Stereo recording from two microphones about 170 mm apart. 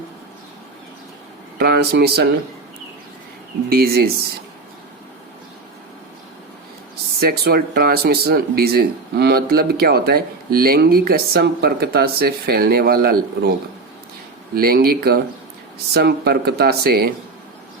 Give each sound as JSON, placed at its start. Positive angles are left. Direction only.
{"t": 1.5, "sound": "speech", "side_deg": -65}
{"t": 3.7, "sound": "speech", "side_deg": -65}
{"t": 7.2, "sound": "speech", "side_deg": -65}
{"t": 14.5, "sound": "speech", "side_deg": -60}